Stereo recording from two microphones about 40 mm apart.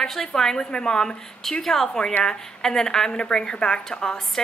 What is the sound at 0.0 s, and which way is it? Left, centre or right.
A woman's voice, centre.